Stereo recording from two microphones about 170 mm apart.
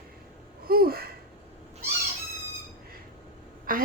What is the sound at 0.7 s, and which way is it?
Speech, 65° right (ahead or behind).